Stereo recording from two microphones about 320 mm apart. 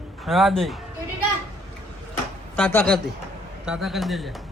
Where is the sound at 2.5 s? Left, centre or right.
Centre.